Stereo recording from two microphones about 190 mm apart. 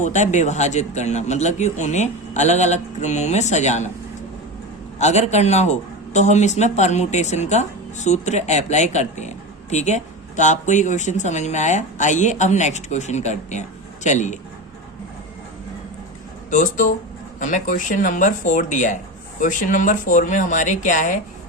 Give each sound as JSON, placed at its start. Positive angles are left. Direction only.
{"t": 0.0, "sound": "speech", "side_deg": 40}
{"t": 4.9, "sound": "speech", "side_deg": 35}
{"t": 16.5, "sound": "speech", "side_deg": 45}